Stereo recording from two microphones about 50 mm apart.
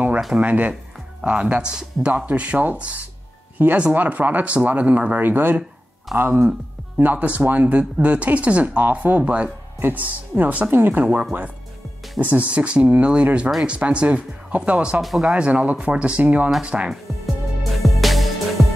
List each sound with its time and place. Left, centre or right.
0.4 s speech: right
2.1 s speech: right
7.0 s speech: right
15.0 s speech: centre
15.2 s speech: right
17.8 s music: centre